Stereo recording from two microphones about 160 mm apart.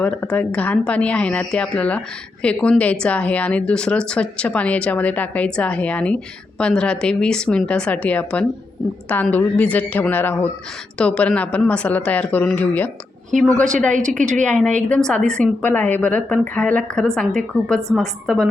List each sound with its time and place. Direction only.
0.0 s a woman's voice: 5° left (ahead or behind)
14.2 s a woman's voice: 50° right (ahead or behind)
14.4 s a woman's voice: 5° left (ahead or behind)